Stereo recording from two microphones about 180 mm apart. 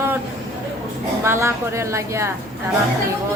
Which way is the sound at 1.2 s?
15° right (ahead or behind).